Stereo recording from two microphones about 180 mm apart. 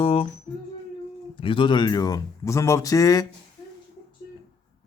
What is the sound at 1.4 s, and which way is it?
Speech, 30° left (ahead or behind).